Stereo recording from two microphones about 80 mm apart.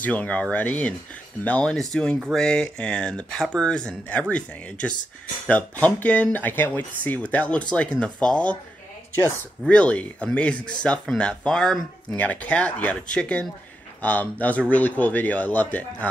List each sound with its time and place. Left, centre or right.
0.0 s a man's voice: centre
9.7 s speech: centre
12.2 s a man's voice: centre